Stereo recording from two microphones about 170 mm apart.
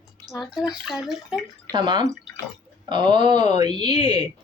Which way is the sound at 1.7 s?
25° right (ahead or behind).